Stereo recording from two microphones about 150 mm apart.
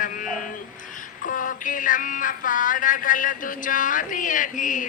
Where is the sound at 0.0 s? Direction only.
60° left (ahead or behind).